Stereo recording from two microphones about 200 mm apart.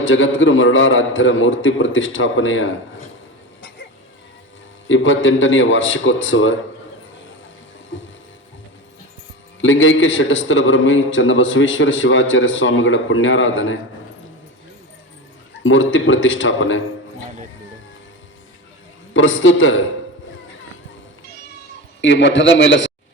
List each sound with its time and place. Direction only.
0.0 s a man's voice: 75° left (ahead or behind)
4.9 s a man's voice: 70° left (ahead or behind)
9.6 s a man's voice: 75° left (ahead or behind)
15.6 s a man's voice: 75° left (ahead or behind)
19.1 s a man's voice: 75° left (ahead or behind)
22.0 s a man's voice: 65° left (ahead or behind)